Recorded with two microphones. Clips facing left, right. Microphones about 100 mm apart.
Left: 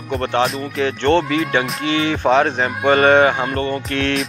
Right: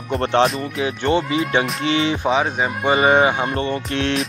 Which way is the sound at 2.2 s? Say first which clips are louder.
Left 4 dB; 5° right (ahead or behind).